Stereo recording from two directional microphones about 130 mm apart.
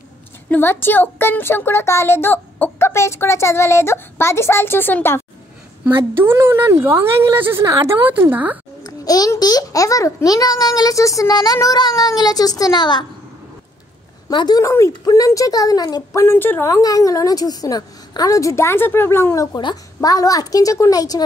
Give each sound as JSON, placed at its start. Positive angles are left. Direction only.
{"t": 0.5, "sound": "a child's voice", "side_deg": 15}
{"t": 5.9, "sound": "speech", "side_deg": -20}
{"t": 8.8, "sound": "speech", "side_deg": 30}
{"t": 14.3, "sound": "speech", "side_deg": 30}